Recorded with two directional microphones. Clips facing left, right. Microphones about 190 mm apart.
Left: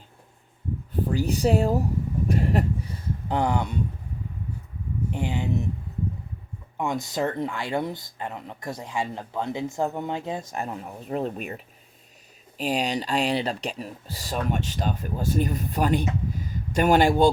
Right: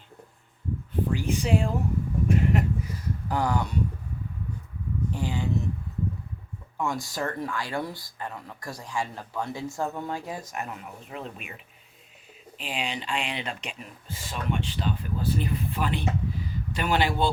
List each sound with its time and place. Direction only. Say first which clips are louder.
1.1 s speech: left 4 dB; 40° left (ahead or behind)
2.2 s a sound: even; 35° left (ahead or behind)
5.1 s speech: left 3 dB; 20° left (ahead or behind)
6.7 s speech: left 3 dB; 20° left (ahead or behind); by 17.2 s 45° left (ahead or behind)